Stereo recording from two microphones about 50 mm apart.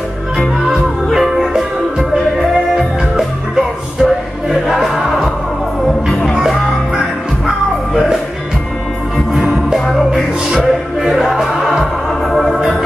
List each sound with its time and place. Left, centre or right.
1.1 s music: centre
7.4 s music: centre
9.8 s music: centre